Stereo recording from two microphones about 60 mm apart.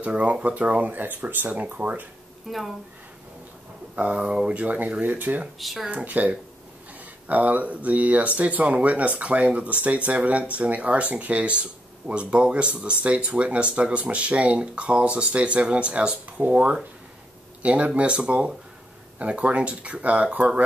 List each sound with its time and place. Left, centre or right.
0.0 s speech: right
2.5 s speech: centre
3.9 s speech: right
5.6 s speech: centre
5.9 s speech: right